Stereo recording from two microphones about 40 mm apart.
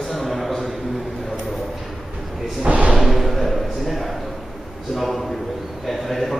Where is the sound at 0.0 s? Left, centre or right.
Centre.